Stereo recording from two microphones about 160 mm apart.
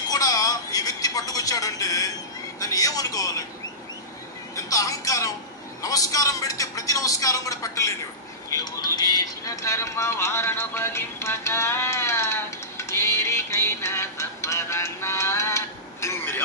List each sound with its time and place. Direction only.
0.1 s a sound: 25° left (ahead or behind)
2.6 s a man's voice: 20° left (ahead or behind)
4.6 s a man's voice: 20° left (ahead or behind)